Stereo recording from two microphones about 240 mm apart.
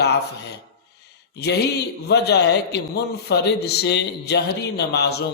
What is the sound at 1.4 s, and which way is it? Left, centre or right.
Mantra, left.